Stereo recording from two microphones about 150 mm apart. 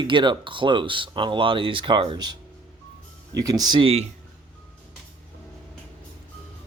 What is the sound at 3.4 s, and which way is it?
Speech, 25° right (ahead or behind).